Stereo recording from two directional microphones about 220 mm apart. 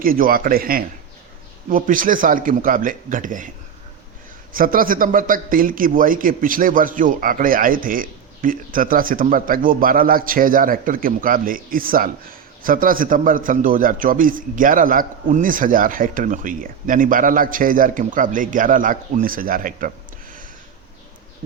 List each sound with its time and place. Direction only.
0.0 s a man's voice: 40° right (ahead or behind)
4.5 s a man's voice: 40° right (ahead or behind)